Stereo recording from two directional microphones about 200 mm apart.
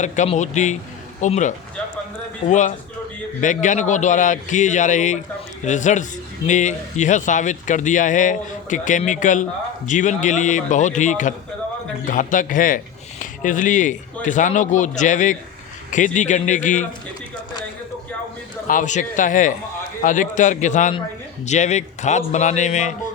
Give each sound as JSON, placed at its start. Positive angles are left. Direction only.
{"t": 0.0, "sound": "speech", "side_deg": 35}
{"t": 18.7, "sound": "speech", "side_deg": 40}